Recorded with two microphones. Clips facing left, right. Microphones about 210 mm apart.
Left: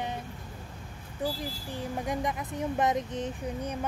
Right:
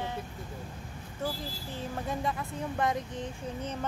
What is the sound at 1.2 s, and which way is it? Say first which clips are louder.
Speech: left 3 dB; 15° left (ahead or behind).